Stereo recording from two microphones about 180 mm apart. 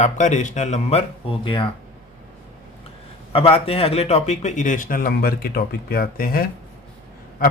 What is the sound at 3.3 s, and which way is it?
Speech, 30° left (ahead or behind).